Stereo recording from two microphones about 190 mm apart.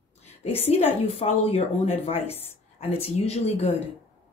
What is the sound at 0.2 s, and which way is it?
A woman's voice, 35° left (ahead or behind).